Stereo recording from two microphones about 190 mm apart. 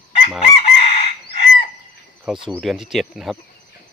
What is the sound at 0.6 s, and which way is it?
Chicken, 30° left (ahead or behind).